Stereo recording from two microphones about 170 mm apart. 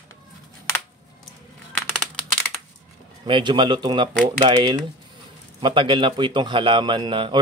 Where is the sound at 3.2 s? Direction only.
25° right (ahead or behind).